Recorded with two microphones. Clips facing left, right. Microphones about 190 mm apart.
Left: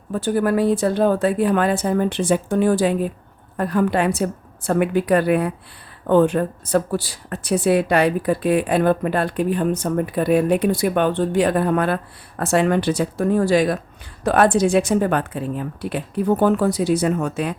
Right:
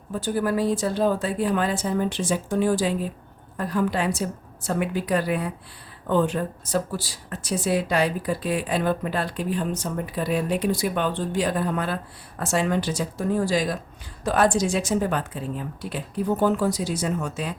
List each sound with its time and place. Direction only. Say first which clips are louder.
0.1 s speech: left 5 dB; 60° left (ahead or behind)